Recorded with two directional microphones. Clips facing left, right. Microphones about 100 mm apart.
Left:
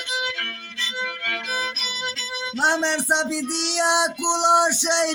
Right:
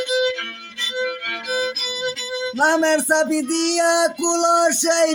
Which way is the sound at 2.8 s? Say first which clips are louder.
Right 6 dB; 55° right (ahead or behind).